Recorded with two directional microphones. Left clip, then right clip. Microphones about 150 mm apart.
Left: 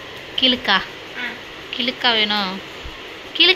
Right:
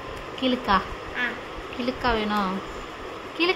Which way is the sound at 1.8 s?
10° right (ahead or behind).